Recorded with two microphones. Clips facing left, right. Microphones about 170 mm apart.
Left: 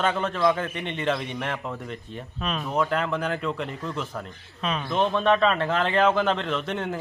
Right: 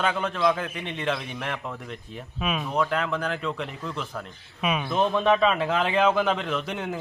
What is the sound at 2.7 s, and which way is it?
A man's voice, 5° left (ahead or behind).